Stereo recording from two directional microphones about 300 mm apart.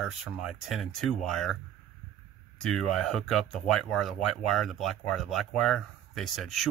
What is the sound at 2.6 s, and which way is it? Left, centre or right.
Speech, centre.